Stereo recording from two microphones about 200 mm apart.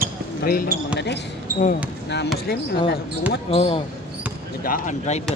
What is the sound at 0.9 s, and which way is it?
Speech, 60° left (ahead or behind).